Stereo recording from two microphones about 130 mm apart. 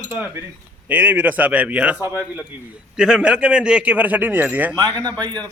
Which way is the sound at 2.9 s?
5° right (ahead or behind).